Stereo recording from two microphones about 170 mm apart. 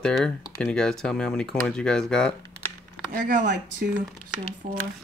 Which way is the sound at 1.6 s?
5° left (ahead or behind).